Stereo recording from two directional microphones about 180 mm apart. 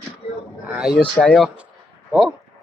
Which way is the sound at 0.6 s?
10° right (ahead or behind).